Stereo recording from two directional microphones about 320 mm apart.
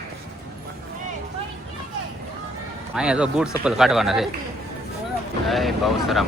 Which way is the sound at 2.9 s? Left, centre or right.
Centre.